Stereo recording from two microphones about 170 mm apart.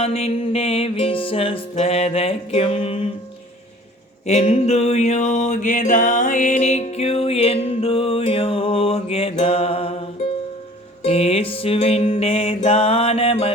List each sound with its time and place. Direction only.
0.0 s music: 35° left (ahead or behind)
4.3 s music: 40° left (ahead or behind)
11.0 s music: 35° left (ahead or behind)